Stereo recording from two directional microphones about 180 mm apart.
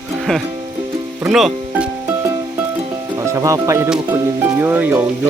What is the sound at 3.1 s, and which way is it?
Speech, 15° right (ahead or behind).